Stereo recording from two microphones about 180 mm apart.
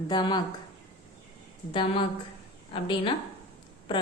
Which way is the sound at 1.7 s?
30° left (ahead or behind).